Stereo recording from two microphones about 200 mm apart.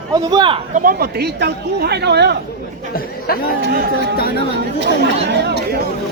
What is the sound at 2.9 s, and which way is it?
Speech, 50° left (ahead or behind).